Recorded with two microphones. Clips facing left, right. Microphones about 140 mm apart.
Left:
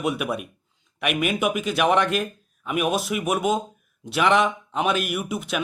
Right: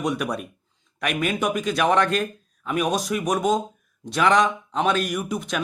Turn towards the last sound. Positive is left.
turn(degrees=5)  # may be behind; listen again after turning